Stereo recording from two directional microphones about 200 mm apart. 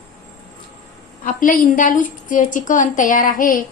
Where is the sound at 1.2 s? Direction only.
45° left (ahead or behind).